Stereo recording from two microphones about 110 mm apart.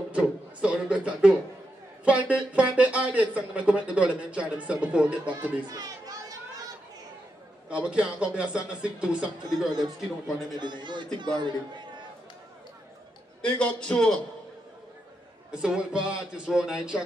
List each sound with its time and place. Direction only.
0.1 s a sound: 10° right (ahead or behind)
2.0 s speech: 10° right (ahead or behind)
5.7 s speech: 35° right (ahead or behind)
7.7 s speech: 10° right (ahead or behind)
10.6 s a man's voice: 45° right (ahead or behind)
13.4 s a man's voice: 10° left (ahead or behind)
15.5 s speech: 5° right (ahead or behind)